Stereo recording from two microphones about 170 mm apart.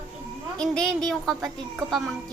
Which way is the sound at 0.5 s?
5° left (ahead or behind).